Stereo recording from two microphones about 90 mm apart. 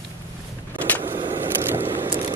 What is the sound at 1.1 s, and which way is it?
Vehicle, 60° right (ahead or behind).